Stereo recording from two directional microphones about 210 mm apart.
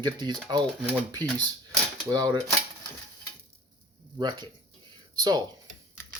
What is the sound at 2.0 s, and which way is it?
Speech, 20° right (ahead or behind).